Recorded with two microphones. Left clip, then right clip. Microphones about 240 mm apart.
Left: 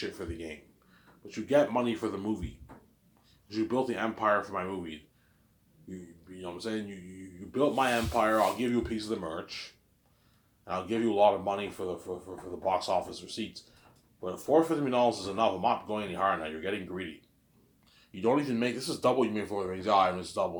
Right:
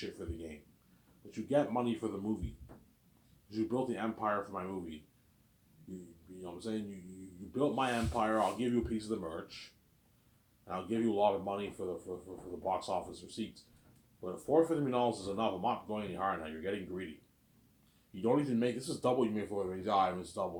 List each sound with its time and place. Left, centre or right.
0.2 s speech: centre
3.5 s speech: centre
6.4 s speech: centre
10.7 s speech: centre
18.2 s speech: centre